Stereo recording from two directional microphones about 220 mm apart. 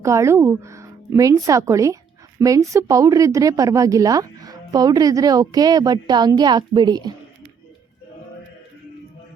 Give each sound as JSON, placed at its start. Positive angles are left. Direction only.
{"t": 0.0, "sound": "a woman's voice", "side_deg": -15}